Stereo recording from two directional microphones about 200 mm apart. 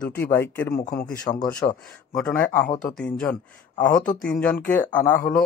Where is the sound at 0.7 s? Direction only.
45° left (ahead or behind).